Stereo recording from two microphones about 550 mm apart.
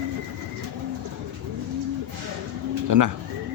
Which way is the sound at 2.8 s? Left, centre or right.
Right.